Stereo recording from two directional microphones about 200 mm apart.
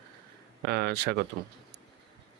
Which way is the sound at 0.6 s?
55° right (ahead or behind).